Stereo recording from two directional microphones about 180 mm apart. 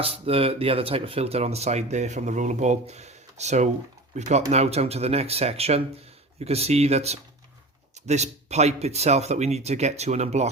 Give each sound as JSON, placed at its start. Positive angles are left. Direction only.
{"t": 0.0, "sound": "speech", "side_deg": -30}